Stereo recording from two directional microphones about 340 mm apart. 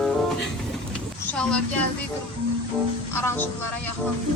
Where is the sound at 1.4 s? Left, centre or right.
Centre.